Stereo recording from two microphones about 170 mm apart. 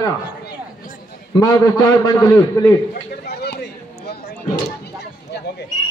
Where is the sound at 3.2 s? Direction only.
75° left (ahead or behind).